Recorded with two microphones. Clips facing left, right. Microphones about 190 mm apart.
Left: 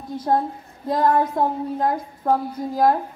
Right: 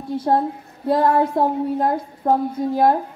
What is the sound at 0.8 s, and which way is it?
Speech, 30° right (ahead or behind).